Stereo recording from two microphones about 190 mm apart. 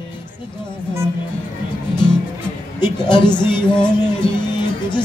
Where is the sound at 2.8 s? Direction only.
25° left (ahead or behind).